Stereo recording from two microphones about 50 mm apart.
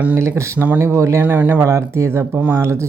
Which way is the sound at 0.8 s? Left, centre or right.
Right.